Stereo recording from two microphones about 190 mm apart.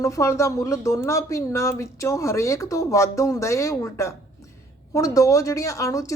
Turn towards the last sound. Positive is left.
turn(degrees=15)  # may be behind; listen again after turning